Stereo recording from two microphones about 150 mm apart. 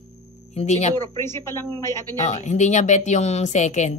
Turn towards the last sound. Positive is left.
turn(degrees=50)  # may be behind; listen again after turning